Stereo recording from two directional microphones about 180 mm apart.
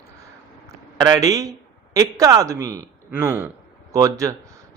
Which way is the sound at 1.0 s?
20° right (ahead or behind).